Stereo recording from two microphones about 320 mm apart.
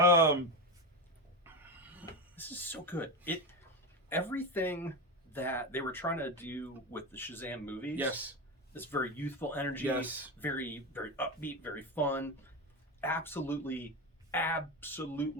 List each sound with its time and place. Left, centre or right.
0.0 s a sound: centre
1.5 s a sound: centre
2.3 s speech: centre
4.1 s speech: centre
9.8 s speech: centre
10.4 s speech: centre